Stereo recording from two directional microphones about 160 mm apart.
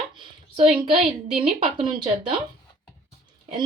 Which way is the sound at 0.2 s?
35° right (ahead or behind).